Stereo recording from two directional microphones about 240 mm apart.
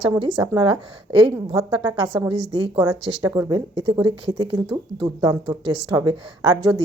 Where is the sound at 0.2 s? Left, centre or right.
Centre.